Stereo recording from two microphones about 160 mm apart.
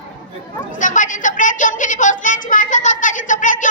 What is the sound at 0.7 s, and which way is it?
A woman's voice, 50° left (ahead or behind).